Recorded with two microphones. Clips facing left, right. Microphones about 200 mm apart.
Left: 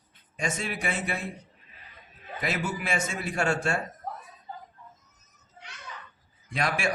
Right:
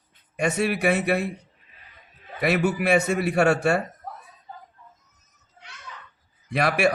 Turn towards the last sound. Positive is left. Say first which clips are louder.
# right 7 dB
turn(degrees=-65)  # may be behind; listen again after turning